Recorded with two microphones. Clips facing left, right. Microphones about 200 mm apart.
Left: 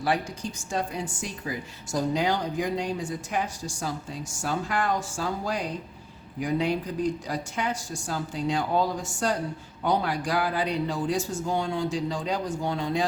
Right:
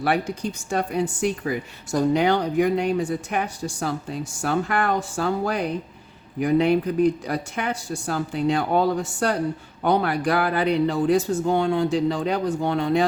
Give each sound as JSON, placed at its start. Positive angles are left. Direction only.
{"t": 0.0, "sound": "speech", "side_deg": -60}